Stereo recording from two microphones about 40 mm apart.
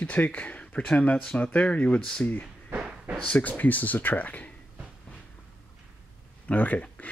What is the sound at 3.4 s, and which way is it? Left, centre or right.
Speech, left.